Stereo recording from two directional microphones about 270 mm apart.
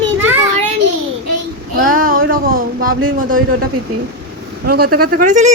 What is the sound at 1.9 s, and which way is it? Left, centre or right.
Speech, right.